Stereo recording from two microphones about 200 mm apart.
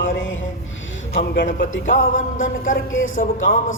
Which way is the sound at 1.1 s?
45° left (ahead or behind).